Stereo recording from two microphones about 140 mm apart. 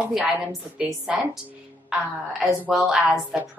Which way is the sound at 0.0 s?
10° right (ahead or behind).